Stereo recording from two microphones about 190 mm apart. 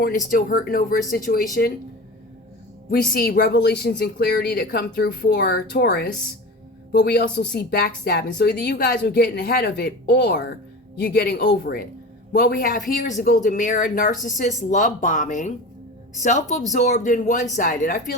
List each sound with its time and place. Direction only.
0.3 s a woman's voice: 45° left (ahead or behind)
3.1 s a woman's voice: 50° left (ahead or behind)